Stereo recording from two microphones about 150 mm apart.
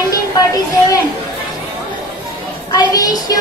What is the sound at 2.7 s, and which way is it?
Speech, 25° left (ahead or behind).